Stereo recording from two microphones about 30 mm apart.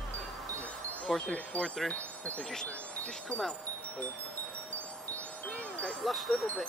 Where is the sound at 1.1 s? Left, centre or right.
Centre.